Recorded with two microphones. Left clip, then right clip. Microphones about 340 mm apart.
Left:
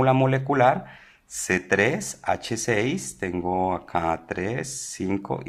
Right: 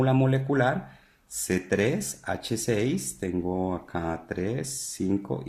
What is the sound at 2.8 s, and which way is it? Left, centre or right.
Speech, left.